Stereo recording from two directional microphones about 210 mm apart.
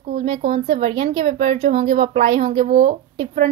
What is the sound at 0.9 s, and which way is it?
A woman's voice, 25° right (ahead or behind).